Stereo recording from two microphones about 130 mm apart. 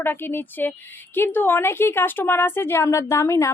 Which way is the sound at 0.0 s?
15° left (ahead or behind).